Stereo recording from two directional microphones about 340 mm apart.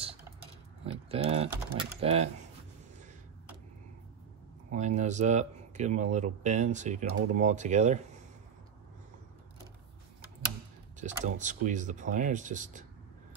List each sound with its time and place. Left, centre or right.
0.8 s a sound: centre
1.5 s speech: centre
4.6 s speech: right
11.0 s speech: right